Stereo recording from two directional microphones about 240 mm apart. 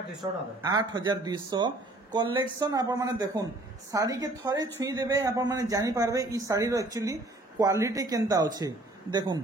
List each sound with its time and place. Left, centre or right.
0.2 s speech: centre